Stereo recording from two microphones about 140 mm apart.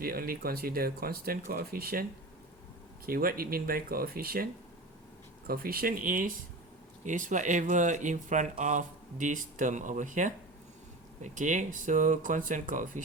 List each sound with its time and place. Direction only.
0.0 s speech: 90° right
3.1 s speech: 90° right
5.5 s speech: 90° right
7.0 s speech: 65° right (ahead or behind)